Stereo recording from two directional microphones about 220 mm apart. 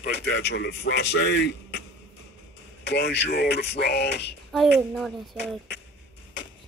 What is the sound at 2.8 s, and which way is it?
A man's voice, 50° left (ahead or behind).